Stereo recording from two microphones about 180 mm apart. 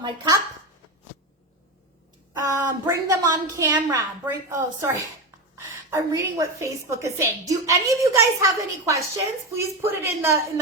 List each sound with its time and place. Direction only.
0.0 s speech: 25° right (ahead or behind)
2.3 s a woman's voice: 20° right (ahead or behind)